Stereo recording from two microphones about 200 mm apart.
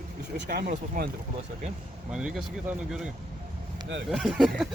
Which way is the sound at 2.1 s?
5° right (ahead or behind).